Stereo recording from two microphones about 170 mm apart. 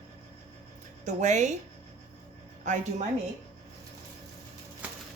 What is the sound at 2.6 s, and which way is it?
Speech, 45° right (ahead or behind).